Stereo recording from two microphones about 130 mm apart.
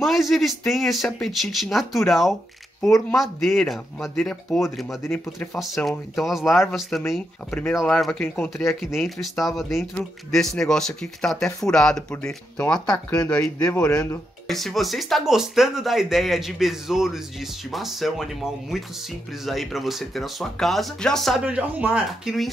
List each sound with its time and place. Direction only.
0.0 s speech: centre (ahead or behind)
5.0 s speech: 20° left (ahead or behind)
5.4 s speech: 5° left (ahead or behind)
21.5 s speech: 10° right (ahead or behind)